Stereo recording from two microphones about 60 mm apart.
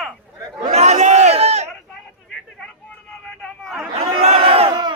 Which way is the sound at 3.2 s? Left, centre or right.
Centre.